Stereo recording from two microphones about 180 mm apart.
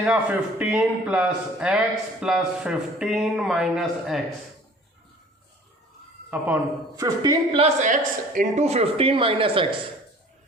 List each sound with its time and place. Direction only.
0.0 s a man's voice: 5° right (ahead or behind)
6.3 s a man's voice: 10° right (ahead or behind)
7.0 s a woman's voice: 20° right (ahead or behind)
7.5 s speech: 40° right (ahead or behind)